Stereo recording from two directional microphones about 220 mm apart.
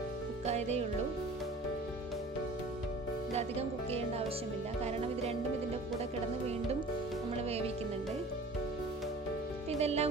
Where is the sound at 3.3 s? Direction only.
30° right (ahead or behind).